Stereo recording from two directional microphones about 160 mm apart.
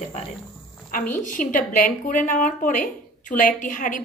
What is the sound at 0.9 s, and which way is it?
A woman's voice, 55° left (ahead or behind).